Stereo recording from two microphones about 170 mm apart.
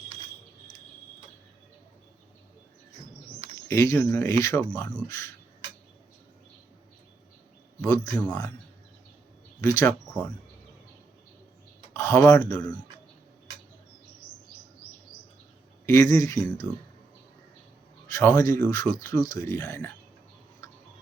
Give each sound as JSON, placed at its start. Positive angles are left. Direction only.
{"t": 3.7, "sound": "speech", "side_deg": 15}
{"t": 7.8, "sound": "speech", "side_deg": 15}
{"t": 9.6, "sound": "speech", "side_deg": 15}
{"t": 11.9, "sound": "a sound", "side_deg": 15}
{"t": 12.5, "sound": "speech", "side_deg": 10}
{"t": 15.9, "sound": "speech", "side_deg": 15}
{"t": 18.1, "sound": "speech", "side_deg": 15}